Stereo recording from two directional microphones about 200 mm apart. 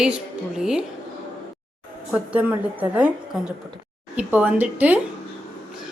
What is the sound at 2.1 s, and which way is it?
A woman's voice, 5° right (ahead or behind).